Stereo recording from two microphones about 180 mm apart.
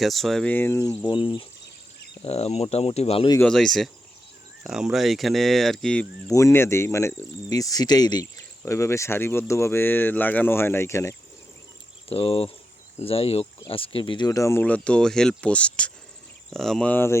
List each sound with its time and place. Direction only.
0.0 s speech: centre (ahead or behind)
1.0 s speech: 25° left (ahead or behind)
3.4 s speech: centre (ahead or behind)
6.2 s speech: 15° left (ahead or behind)
12.0 s speech: 30° left (ahead or behind); by 17.2 s 10° left (ahead or behind)